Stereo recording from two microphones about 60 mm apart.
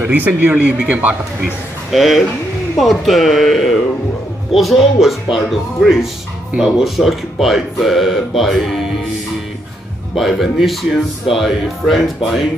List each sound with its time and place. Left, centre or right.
0.0 s speech: right
1.9 s speech: centre
10.2 s speech: centre